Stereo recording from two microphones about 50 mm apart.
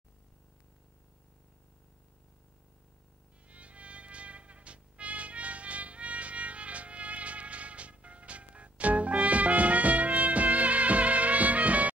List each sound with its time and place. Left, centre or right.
3.4 s music: right